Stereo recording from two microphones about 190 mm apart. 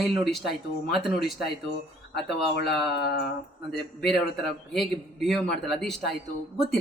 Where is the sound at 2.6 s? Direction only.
Centre (ahead or behind).